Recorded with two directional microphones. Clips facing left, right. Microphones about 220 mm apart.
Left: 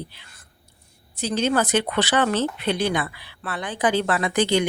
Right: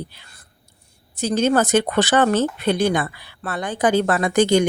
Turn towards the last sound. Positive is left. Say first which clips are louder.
# right 4 dB
turn(degrees=-45)  # may be behind; listen again after turning